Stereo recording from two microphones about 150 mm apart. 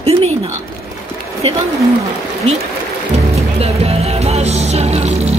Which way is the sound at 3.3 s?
45° right (ahead or behind).